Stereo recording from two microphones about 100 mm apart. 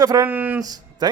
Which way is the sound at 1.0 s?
40° right (ahead or behind).